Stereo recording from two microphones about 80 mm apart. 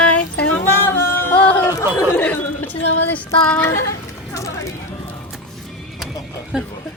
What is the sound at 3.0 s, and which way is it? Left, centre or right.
Music, centre.